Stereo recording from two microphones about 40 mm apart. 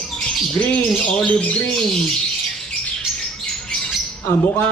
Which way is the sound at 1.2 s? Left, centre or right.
Left.